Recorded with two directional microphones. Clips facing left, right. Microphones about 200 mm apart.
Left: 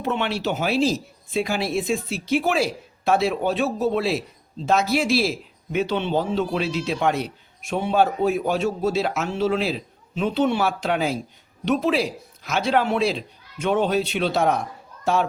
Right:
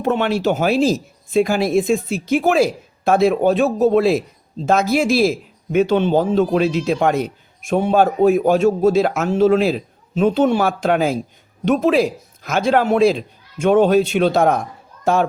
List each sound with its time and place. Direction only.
0.0 s a child's voice: 45° right (ahead or behind)